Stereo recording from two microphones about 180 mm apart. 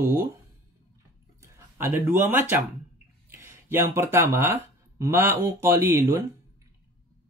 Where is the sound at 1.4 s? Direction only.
15° right (ahead or behind).